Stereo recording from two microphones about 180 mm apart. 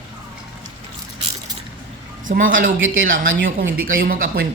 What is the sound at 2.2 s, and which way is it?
Speech, 50° right (ahead or behind).